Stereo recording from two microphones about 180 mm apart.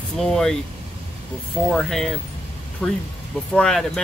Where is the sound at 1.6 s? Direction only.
Centre (ahead or behind).